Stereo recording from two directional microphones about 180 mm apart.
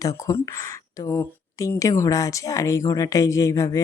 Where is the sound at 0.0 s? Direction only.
20° left (ahead or behind).